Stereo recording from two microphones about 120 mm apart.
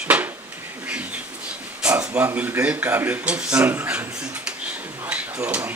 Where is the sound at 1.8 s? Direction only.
10° right (ahead or behind).